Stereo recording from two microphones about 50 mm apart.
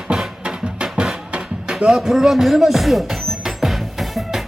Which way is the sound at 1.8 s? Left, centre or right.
Centre.